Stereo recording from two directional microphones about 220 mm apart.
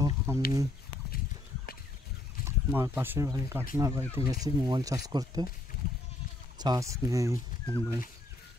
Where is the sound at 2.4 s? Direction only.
10° right (ahead or behind).